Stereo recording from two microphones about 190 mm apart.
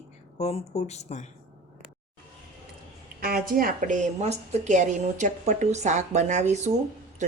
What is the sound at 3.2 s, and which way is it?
A woman's voice, 50° right (ahead or behind).